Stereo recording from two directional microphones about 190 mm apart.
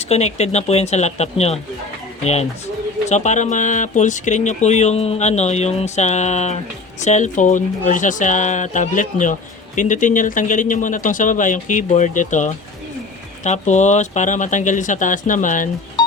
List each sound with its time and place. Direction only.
0.0 s a man's voice: 35° left (ahead or behind)